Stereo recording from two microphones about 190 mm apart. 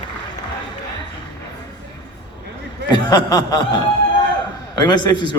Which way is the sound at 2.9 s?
20° left (ahead or behind).